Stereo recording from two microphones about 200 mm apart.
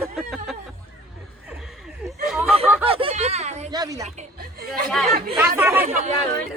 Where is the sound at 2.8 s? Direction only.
30° right (ahead or behind).